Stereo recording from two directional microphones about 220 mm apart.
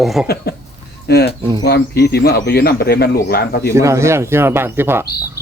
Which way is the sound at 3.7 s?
10° right (ahead or behind).